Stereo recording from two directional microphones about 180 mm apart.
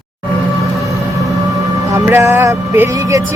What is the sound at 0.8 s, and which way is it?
Vehicle, 20° right (ahead or behind).